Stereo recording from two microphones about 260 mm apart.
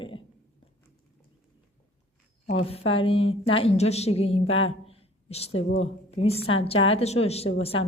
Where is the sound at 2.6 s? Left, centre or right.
Left.